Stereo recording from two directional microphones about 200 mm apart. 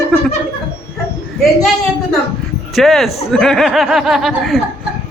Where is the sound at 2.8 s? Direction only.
Centre (ahead or behind).